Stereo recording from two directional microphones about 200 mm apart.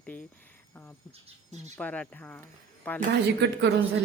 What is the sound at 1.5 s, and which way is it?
Speech, 35° right (ahead or behind).